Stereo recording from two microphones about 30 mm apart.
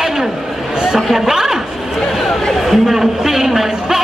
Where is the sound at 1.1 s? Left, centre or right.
Centre.